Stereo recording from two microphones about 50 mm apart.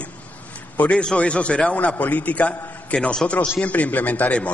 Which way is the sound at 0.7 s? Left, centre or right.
Left.